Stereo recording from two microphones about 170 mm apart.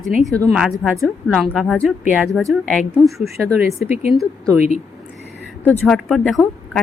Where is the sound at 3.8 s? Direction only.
40° left (ahead or behind).